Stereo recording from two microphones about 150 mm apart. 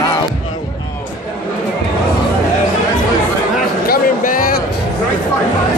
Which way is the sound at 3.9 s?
65° left (ahead or behind).